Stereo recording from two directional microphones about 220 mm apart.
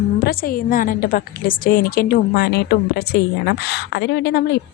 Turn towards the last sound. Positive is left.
turn(degrees=50)  # may be behind; listen again after turning